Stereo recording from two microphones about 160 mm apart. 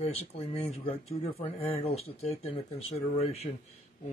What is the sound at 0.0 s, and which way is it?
Speech, 40° left (ahead or behind).